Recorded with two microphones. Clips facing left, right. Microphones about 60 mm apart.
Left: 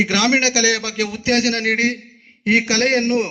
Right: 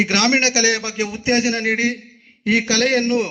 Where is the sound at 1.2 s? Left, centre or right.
Left.